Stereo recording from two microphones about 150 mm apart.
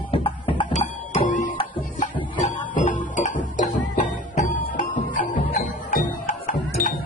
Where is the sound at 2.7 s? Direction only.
60° left (ahead or behind).